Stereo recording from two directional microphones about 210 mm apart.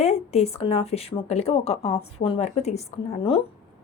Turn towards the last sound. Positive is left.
turn(degrees=25)  # may be behind; listen again after turning